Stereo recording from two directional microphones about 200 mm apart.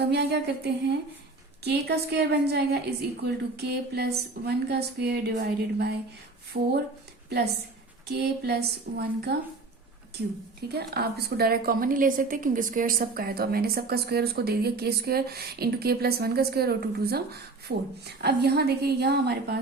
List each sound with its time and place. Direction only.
0.0 s a woman's voice: 60° right (ahead or behind)
10.7 s a woman's voice: 50° right (ahead or behind)